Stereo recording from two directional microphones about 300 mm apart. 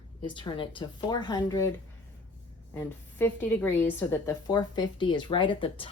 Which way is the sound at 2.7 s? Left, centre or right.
Centre.